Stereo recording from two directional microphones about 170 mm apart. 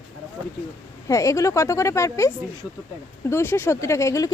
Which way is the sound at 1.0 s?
20° left (ahead or behind).